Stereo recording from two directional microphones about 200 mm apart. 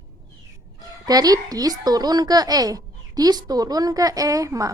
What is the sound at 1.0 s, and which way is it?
A woman's voice, 20° right (ahead or behind).